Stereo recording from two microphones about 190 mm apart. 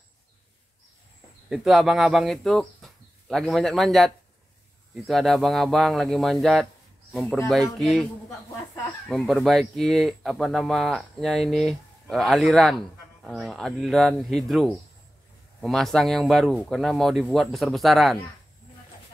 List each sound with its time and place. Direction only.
1.5 s speech: centre (ahead or behind)
9.1 s speech: centre (ahead or behind)